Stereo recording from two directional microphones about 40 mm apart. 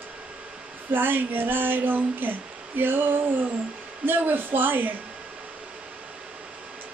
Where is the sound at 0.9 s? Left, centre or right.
Right.